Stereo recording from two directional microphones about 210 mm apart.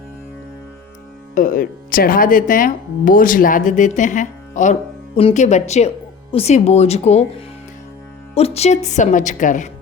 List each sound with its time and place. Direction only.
1.4 s speech: 40° left (ahead or behind)